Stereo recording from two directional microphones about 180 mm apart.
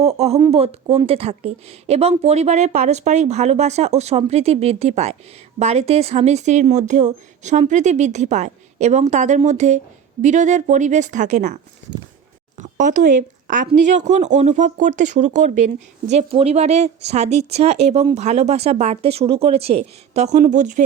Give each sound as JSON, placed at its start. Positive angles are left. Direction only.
{"t": 0.0, "sound": "speech", "side_deg": -35}